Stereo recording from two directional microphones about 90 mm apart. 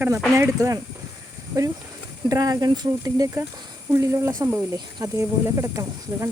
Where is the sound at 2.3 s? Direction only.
45° right (ahead or behind).